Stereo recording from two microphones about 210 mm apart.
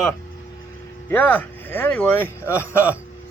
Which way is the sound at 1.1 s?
10° left (ahead or behind).